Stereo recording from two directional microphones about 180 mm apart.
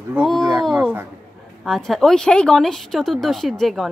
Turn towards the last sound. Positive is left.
turn(degrees=0)  # may be behind; listen again after turning